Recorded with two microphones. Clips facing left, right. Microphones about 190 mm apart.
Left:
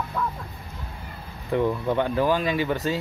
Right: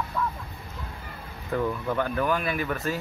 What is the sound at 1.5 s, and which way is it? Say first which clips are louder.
Speech: left 4 dB; 20° left (ahead or behind).